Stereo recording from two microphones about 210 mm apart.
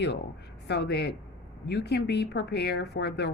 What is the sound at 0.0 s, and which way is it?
A woman's voice, 55° left (ahead or behind).